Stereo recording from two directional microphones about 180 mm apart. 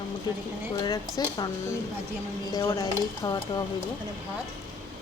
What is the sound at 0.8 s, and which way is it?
Speech, 20° left (ahead or behind).